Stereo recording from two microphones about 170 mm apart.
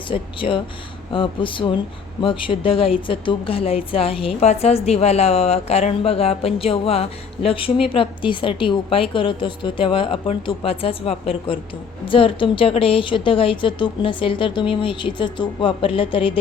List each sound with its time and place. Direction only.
0.1 s a woman's voice: 30° left (ahead or behind)